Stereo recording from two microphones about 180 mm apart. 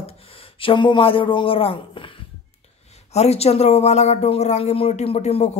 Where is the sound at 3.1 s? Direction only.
35° left (ahead or behind).